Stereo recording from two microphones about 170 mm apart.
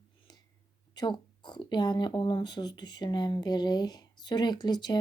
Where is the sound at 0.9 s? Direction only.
25° left (ahead or behind).